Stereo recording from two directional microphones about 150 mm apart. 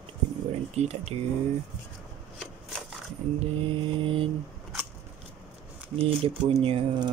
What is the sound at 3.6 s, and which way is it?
Speech, 35° right (ahead or behind).